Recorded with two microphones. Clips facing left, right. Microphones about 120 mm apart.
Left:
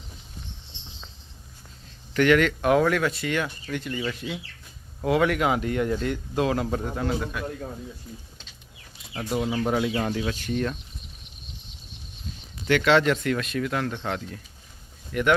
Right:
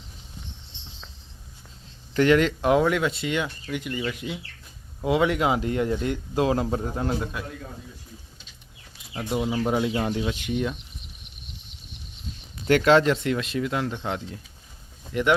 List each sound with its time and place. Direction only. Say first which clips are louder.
2.1 s speech: even; 25° right (ahead or behind)
9.1 s speech: even; 20° right (ahead or behind)
12.6 s speech: right 2 dB; 40° right (ahead or behind)